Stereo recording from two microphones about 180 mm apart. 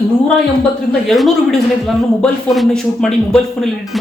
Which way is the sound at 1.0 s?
Centre (ahead or behind).